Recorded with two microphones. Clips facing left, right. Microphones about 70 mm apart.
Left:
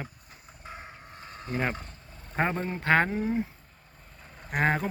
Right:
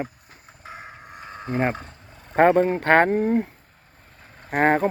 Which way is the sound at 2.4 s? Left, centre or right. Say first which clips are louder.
Right 12 dB; right.